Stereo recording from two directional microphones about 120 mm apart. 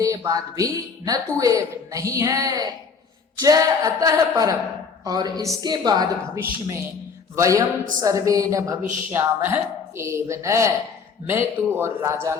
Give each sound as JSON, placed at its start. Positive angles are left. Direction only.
{"t": 0.0, "sound": "a woman's voice", "side_deg": -25}